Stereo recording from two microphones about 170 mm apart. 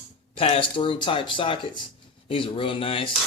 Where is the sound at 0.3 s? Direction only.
35° left (ahead or behind).